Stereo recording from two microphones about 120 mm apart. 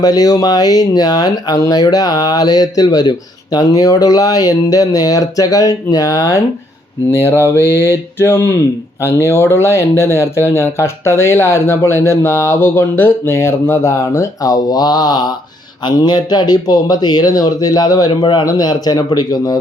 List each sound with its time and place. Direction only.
0.0 s speech: 30° left (ahead or behind)